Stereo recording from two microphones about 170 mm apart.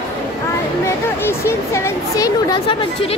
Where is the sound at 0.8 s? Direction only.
15° left (ahead or behind).